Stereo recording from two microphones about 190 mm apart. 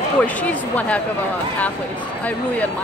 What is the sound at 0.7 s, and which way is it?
Speech, 5° left (ahead or behind).